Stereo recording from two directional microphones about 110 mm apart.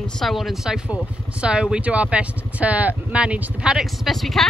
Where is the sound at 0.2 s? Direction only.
Centre (ahead or behind).